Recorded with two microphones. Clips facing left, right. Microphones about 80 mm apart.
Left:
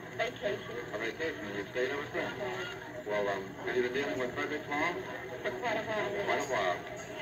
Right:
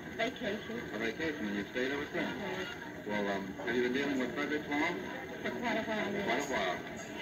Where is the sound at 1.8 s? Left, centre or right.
Left.